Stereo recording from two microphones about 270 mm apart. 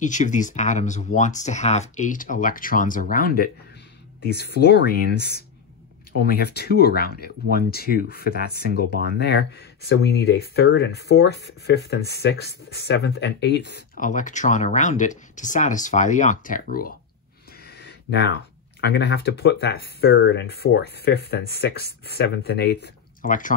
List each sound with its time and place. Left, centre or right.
0.0 s speech: left
17.6 s a sound: left
18.8 s speech: left